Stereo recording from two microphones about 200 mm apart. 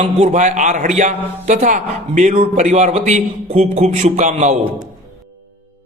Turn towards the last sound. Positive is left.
turn(degrees=-35)  # may be behind; listen again after turning